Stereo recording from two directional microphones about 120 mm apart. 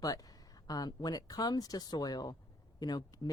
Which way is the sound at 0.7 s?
35° left (ahead or behind).